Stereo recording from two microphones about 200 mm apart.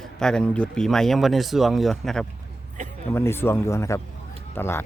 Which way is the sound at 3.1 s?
10° left (ahead or behind).